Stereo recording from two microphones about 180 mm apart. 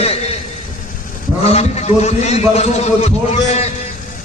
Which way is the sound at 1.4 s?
35° left (ahead or behind).